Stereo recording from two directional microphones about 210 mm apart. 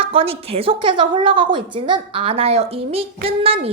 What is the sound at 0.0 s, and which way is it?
A woman's voice, 25° right (ahead or behind).